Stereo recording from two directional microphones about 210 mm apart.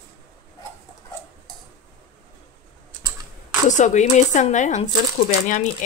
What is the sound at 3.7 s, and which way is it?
A woman's voice, 35° left (ahead or behind).